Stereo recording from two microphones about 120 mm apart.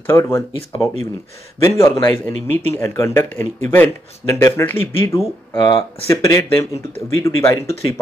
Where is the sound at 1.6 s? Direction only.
25° left (ahead or behind).